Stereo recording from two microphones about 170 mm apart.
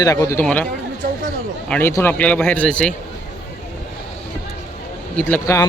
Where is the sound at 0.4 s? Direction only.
5° left (ahead or behind).